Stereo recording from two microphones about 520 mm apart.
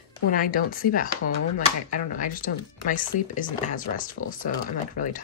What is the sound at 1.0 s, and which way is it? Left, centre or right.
Speech, left.